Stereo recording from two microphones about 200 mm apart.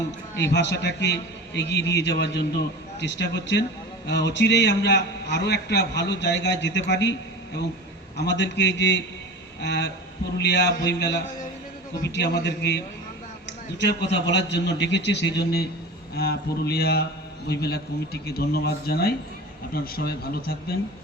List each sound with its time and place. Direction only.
0.5 s a man's voice: 60° left (ahead or behind)